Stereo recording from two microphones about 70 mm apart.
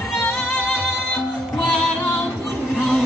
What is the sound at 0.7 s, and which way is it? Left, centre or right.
Music, centre.